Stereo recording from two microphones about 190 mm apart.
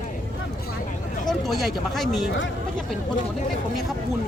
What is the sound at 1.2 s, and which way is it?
Speech, centre (ahead or behind).